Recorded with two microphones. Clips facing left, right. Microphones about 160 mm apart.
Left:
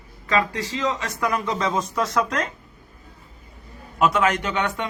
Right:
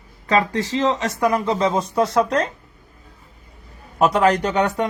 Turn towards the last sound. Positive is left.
turn(degrees=-40)  # may be behind; listen again after turning